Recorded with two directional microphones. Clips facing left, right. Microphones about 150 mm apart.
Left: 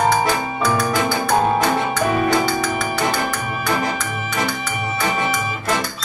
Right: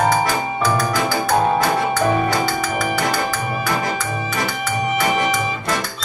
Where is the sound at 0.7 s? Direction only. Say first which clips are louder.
Even; 5° right (ahead or behind).